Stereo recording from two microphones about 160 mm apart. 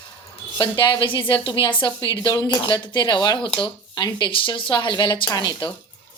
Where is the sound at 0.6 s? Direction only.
30° left (ahead or behind).